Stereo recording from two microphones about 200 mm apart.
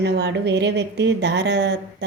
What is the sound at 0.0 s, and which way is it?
Speech, 60° right (ahead or behind).